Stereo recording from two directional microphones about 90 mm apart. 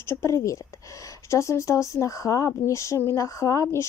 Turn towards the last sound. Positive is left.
turn(degrees=35)  # may be behind; listen again after turning